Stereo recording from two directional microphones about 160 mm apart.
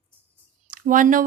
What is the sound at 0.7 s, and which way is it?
Speech, 55° right (ahead or behind).